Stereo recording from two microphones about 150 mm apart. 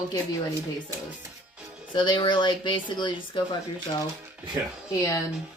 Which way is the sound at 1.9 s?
30° left (ahead or behind).